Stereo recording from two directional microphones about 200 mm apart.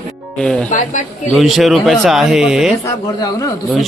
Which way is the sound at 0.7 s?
40° left (ahead or behind).